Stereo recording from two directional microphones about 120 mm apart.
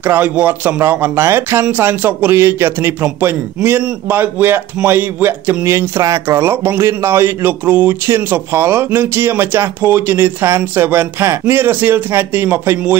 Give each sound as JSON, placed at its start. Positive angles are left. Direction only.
{"t": 0.0, "sound": "speech", "side_deg": -15}